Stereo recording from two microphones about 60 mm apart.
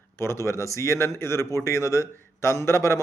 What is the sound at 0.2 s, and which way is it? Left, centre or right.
Speech, left.